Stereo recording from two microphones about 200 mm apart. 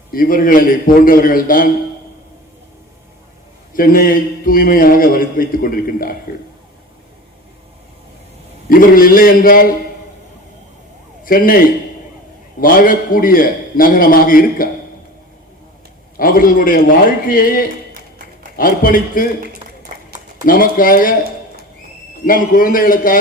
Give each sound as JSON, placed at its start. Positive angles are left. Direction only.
{"t": 0.1, "sound": "a man's voice", "side_deg": 45}
{"t": 3.8, "sound": "a man's voice", "side_deg": 45}
{"t": 8.7, "sound": "a man's voice", "side_deg": 45}
{"t": 11.3, "sound": "a man's voice", "side_deg": 45}
{"t": 16.1, "sound": "a man's voice", "side_deg": 45}
{"t": 20.4, "sound": "a man's voice", "side_deg": 45}
{"t": 22.2, "sound": "a man's voice", "side_deg": 45}